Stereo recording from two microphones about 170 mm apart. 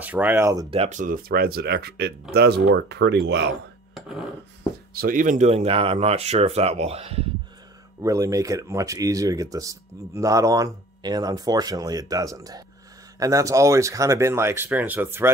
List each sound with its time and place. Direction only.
0.0 s speech: 10° right (ahead or behind)
0.7 s speech: 40° right (ahead or behind); by 3.4 s 85° right
3.9 s speech: 5° right (ahead or behind)
4.9 s speech: 55° right (ahead or behind); by 7.2 s 35° right (ahead or behind)
8.0 s speech: 20° right (ahead or behind)